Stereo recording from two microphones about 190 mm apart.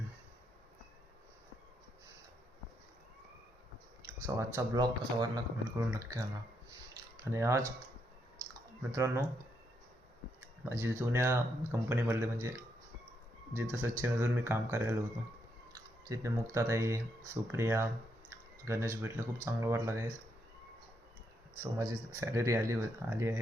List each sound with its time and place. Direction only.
4.0 s speech: 15° right (ahead or behind)
7.3 s speech: 15° right (ahead or behind)
8.9 s speech: 15° right (ahead or behind)
10.4 s speech: 10° right (ahead or behind)
16.0 s speech: 15° right (ahead or behind)
18.3 s a sound: 15° right (ahead or behind)
19.5 s speech: 15° right (ahead or behind)
21.6 s speech: 15° right (ahead or behind)